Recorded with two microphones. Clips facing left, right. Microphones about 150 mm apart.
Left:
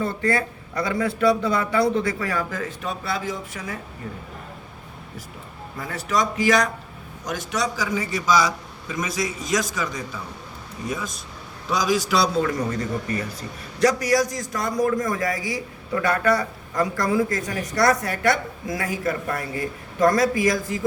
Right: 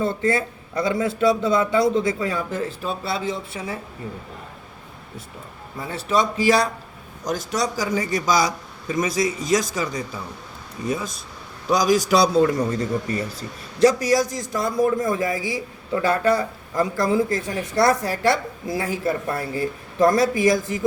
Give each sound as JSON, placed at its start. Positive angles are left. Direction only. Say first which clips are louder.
{"t": 0.0, "sound": "a man's voice", "louder": "right 2 dB", "side_deg": -25}
{"t": 5.9, "sound": "a man's voice", "louder": "right 2 dB", "side_deg": -25}
{"t": 11.7, "sound": "a man's voice", "louder": "right 4 dB", "side_deg": -40}